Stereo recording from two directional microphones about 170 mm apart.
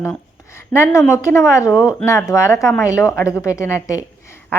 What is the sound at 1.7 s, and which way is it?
Speech, 5° right (ahead or behind).